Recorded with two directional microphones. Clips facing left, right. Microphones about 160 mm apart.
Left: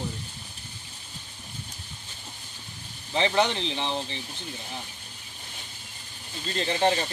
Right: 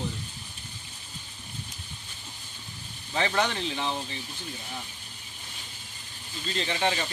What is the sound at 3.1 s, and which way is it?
Speech, 20° left (ahead or behind).